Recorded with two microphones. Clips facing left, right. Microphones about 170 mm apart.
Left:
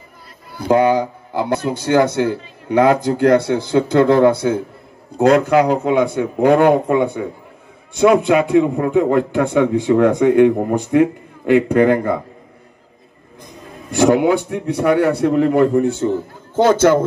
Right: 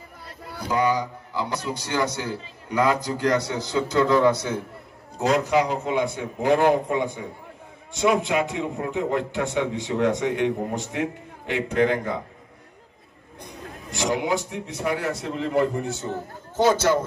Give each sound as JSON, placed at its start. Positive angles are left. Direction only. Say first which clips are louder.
{"t": 0.6, "sound": "a man's voice", "louder": "left 9 dB", "side_deg": 55}
{"t": 13.9, "sound": "a man's voice", "louder": "left 11 dB", "side_deg": 60}